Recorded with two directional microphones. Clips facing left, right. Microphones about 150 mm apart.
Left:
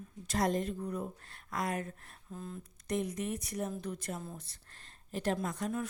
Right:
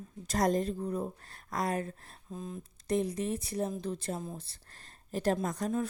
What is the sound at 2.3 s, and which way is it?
Speech, 15° right (ahead or behind).